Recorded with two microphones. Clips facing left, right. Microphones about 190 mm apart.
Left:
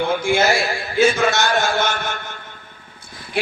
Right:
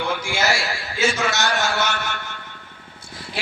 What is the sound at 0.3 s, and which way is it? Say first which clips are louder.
A man's voice: left 6 dB; 55° left (ahead or behind).